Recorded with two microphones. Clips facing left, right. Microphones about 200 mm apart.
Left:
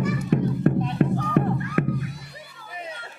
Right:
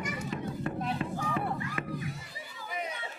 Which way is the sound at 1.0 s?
65° left (ahead or behind).